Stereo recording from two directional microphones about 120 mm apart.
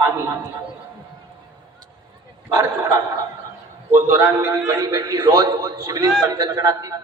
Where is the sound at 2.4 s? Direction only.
25° right (ahead or behind).